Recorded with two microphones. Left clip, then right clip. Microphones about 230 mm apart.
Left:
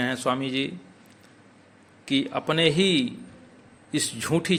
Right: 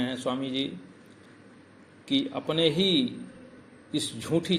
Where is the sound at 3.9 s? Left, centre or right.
Left.